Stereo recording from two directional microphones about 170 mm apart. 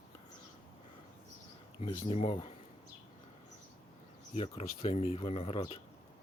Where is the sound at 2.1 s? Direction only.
35° left (ahead or behind).